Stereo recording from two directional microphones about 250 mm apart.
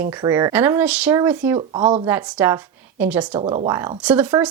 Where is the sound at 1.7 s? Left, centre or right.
Centre.